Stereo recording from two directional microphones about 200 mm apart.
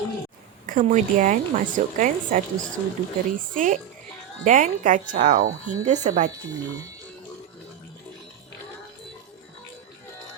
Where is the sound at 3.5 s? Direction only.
40° right (ahead or behind).